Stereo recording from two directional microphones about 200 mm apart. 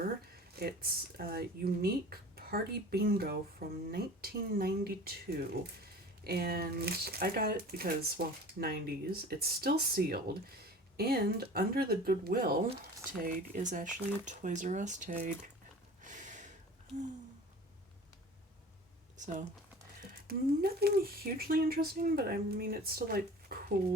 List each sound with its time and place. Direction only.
1.1 s speech: 50° right (ahead or behind)
16.0 s gasp: 40° right (ahead or behind)
20.2 s speech: 50° right (ahead or behind)